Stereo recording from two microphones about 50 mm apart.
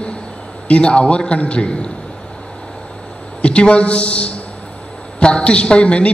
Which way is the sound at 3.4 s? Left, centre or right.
Left.